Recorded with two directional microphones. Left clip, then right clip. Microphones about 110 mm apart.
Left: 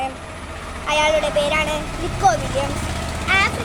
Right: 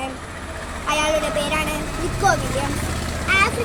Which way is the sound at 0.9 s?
15° left (ahead or behind).